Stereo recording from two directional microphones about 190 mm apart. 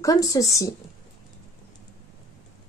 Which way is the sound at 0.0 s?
20° left (ahead or behind).